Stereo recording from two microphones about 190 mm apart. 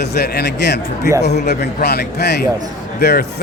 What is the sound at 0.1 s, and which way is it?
A man's voice, 60° left (ahead or behind).